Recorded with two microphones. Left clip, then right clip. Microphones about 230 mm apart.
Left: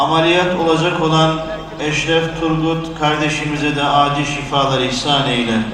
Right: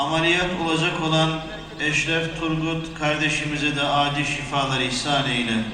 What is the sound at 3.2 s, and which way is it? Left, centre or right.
Speech, right.